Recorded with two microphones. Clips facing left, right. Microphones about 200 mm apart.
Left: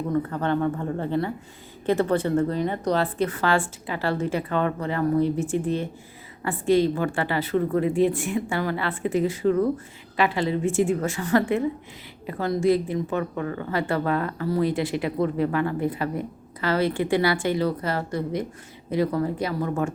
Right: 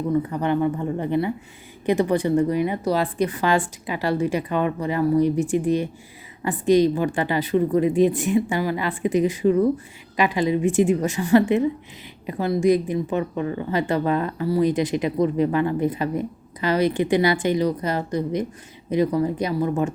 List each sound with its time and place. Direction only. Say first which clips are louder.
0.1 s a woman's voice: right 2 dB; 15° right (ahead or behind)